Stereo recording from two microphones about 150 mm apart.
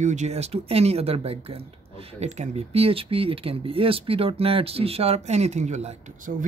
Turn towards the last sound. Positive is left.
turn(degrees=-50)  # may be behind; listen again after turning